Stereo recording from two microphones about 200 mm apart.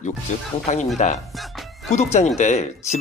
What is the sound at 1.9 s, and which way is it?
Speech, 35° left (ahead or behind).